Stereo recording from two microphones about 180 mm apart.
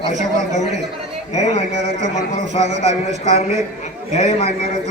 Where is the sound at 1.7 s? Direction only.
75° right (ahead or behind).